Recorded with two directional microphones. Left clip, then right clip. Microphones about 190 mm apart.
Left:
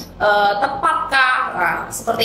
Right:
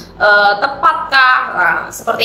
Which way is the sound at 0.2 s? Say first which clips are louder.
Right 5 dB; 20° left (ahead or behind).